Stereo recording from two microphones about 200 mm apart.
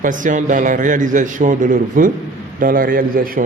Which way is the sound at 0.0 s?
40° right (ahead or behind).